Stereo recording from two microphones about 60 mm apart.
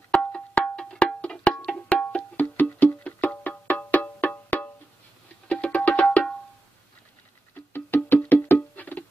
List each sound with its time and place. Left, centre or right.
0.1 s percussion: centre
2.3 s music: left
7.7 s music: left